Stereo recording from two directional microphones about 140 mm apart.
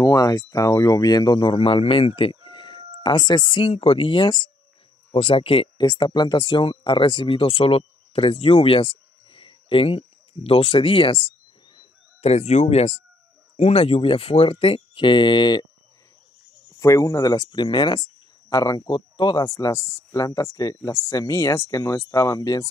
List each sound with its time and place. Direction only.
0.0 s speech: 25° left (ahead or behind)
12.2 s speech: 50° left (ahead or behind); by 15.6 s 30° left (ahead or behind)
16.8 s speech: 25° left (ahead or behind)